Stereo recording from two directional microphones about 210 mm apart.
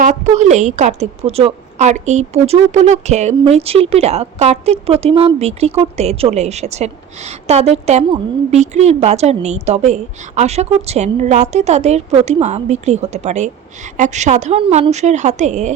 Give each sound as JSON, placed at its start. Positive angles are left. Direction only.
{"t": 0.0, "sound": "a woman's voice", "side_deg": -35}